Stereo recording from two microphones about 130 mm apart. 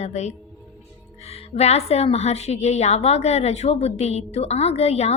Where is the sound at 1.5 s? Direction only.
55° left (ahead or behind).